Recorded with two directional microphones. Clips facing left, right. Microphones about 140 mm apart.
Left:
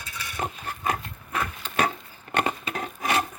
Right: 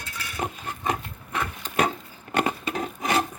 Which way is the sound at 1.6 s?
45° right (ahead or behind).